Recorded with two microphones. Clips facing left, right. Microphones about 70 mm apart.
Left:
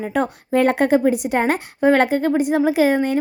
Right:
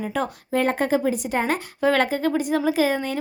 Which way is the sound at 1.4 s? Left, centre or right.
Left.